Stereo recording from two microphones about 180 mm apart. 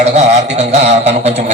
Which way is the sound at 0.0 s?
35° right (ahead or behind).